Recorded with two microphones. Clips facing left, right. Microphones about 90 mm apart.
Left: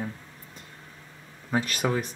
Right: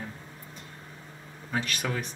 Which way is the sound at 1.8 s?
25° left (ahead or behind).